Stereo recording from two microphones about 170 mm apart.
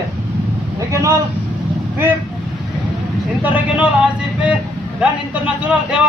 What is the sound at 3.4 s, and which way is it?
Speech, 10° right (ahead or behind).